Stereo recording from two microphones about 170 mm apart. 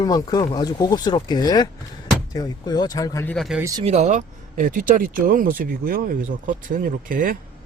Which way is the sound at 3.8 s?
40° right (ahead or behind).